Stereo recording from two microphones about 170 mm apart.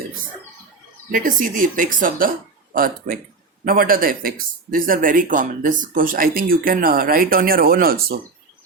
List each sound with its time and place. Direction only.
1.1 s speech: 55° right (ahead or behind)